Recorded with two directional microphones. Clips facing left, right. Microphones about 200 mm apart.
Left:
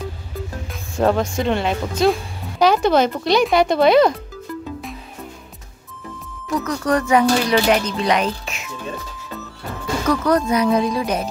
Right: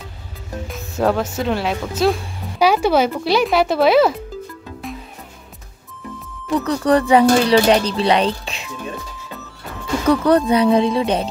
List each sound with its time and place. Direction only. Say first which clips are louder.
0.7 s speech: even; centre (ahead or behind)
6.5 s speech: right 4 dB; 30° right (ahead or behind)
10.0 s speech: right 4 dB; 30° right (ahead or behind)